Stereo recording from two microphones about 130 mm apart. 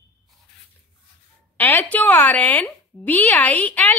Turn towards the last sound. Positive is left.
turn(degrees=10)  # may be behind; listen again after turning